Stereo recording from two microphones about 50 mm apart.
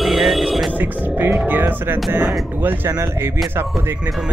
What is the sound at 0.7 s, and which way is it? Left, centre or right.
Speech, right.